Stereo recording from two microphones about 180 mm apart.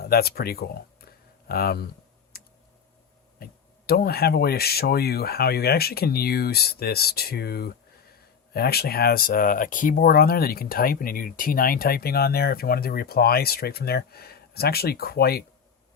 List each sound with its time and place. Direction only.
0.0 s speech: 60° left (ahead or behind)
2.3 s clicking: 60° left (ahead or behind)
3.3 s speech: 60° left (ahead or behind)